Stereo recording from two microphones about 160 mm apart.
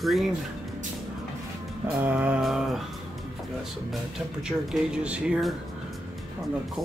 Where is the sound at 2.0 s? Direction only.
10° right (ahead or behind).